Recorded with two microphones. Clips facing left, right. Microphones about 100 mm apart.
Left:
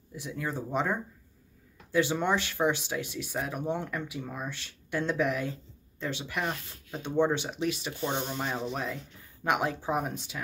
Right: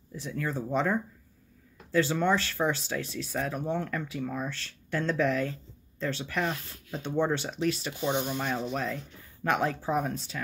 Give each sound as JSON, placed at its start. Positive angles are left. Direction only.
{"t": 0.1, "sound": "speech", "side_deg": 15}
{"t": 7.9, "sound": "speech", "side_deg": -15}
{"t": 8.4, "sound": "speech", "side_deg": 15}